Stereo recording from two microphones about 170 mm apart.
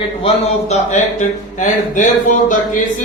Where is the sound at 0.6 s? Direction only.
40° left (ahead or behind).